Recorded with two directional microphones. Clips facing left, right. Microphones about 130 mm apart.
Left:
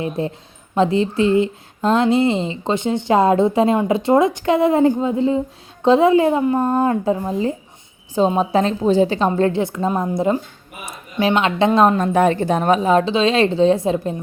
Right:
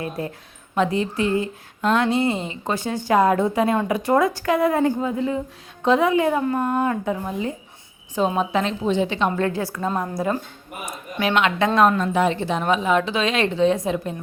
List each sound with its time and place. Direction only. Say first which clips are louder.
0.0 s a woman's voice: left 5 dB; 25° left (ahead or behind)
11.9 s speech: left 5 dB; 45° left (ahead or behind); by 14.2 s 30° left (ahead or behind)